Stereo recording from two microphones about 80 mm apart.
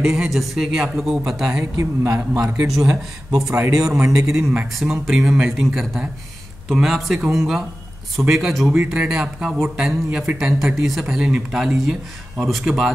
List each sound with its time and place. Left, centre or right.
0.0 s a man's voice: centre
1.8 s a man's voice: right
2.5 s a man's voice: centre
3.5 s a man's voice: right
3.9 s a man's voice: centre